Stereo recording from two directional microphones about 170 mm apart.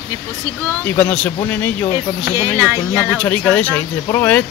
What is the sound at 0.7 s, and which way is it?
Speech, 10° left (ahead or behind).